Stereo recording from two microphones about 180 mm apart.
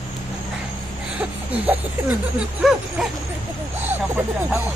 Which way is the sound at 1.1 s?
5° right (ahead or behind).